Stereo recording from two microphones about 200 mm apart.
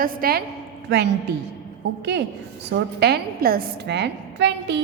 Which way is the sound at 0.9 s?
55° right (ahead or behind).